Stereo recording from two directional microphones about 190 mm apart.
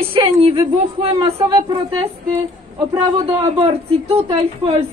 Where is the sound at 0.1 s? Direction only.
30° right (ahead or behind).